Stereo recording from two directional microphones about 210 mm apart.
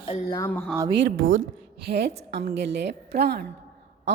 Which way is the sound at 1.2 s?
70° right (ahead or behind).